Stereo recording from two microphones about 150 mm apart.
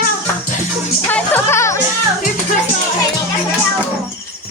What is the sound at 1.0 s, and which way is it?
Speech, 10° left (ahead or behind).